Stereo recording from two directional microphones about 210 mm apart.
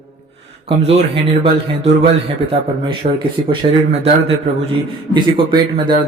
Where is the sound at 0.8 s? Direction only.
30° right (ahead or behind).